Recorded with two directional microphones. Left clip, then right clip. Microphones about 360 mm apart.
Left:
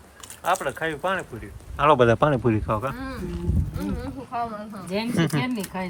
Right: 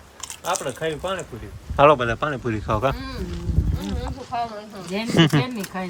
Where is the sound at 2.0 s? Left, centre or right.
Centre.